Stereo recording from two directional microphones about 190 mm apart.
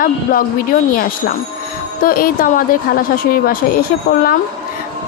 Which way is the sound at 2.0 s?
50° left (ahead or behind).